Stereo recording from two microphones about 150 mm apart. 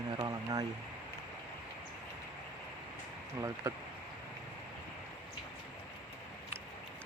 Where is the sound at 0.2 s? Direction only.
25° right (ahead or behind).